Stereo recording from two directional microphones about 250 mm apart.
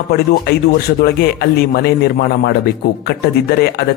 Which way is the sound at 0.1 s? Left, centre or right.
Left.